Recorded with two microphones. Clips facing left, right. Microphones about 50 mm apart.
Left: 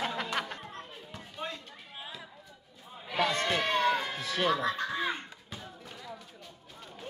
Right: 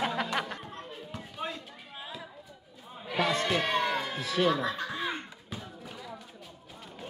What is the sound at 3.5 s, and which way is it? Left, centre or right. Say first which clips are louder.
Music: right 1 dB; centre.